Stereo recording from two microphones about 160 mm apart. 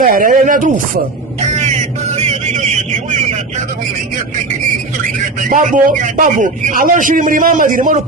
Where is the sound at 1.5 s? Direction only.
45° right (ahead or behind).